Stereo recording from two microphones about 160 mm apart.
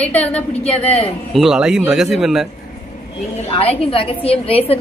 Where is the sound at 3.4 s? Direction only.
40° left (ahead or behind).